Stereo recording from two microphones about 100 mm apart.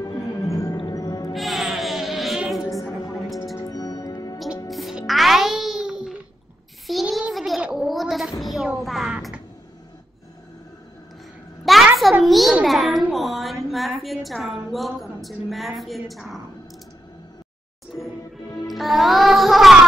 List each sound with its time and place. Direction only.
0.0 s music: 35° left (ahead or behind)
1.3 s music: centre (ahead or behind)
3.6 s music: 40° left (ahead or behind)
4.6 s music: centre (ahead or behind)
6.9 s child singing: centre (ahead or behind)
7.6 s a sound: 5° right (ahead or behind)
11.6 s a sound: centre (ahead or behind)
18.7 s music: centre (ahead or behind)